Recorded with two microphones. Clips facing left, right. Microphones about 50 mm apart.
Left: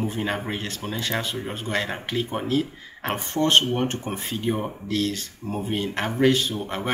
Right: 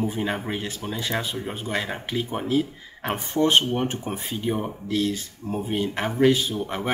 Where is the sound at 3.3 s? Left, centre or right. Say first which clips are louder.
Even; centre.